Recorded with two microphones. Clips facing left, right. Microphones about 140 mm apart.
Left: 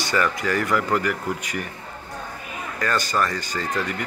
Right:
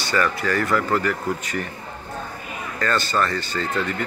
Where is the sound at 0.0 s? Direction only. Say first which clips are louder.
Right 1 dB; 15° left (ahead or behind).